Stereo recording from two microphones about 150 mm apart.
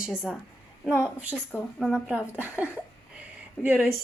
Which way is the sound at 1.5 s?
10° left (ahead or behind).